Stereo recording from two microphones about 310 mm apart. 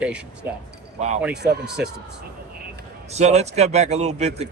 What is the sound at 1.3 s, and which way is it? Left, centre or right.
Speech, right.